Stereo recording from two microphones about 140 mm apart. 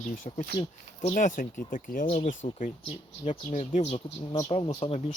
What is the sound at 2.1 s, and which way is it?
Speech, 55° left (ahead or behind).